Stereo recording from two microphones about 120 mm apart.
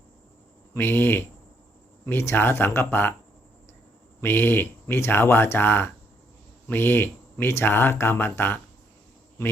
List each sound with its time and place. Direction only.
0.7 s speech: 20° left (ahead or behind)
4.2 s speech: 20° left (ahead or behind)